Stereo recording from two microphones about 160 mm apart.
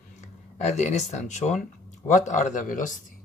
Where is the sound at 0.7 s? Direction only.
45° left (ahead or behind).